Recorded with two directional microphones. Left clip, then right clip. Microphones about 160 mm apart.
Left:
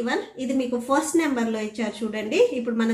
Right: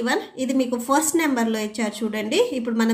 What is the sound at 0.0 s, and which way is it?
A woman's voice, 35° right (ahead or behind).